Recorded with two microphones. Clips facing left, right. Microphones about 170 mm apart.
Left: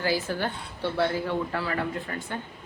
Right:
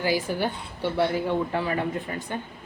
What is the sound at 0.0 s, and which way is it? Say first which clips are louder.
Speech: right 2 dB; 15° right (ahead or behind).